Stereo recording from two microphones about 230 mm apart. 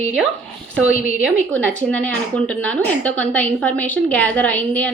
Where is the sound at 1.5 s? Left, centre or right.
Centre.